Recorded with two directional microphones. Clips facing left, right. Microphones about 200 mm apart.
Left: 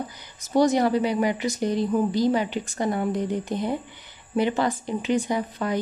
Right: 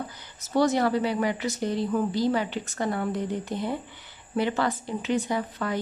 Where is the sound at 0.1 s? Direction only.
15° left (ahead or behind).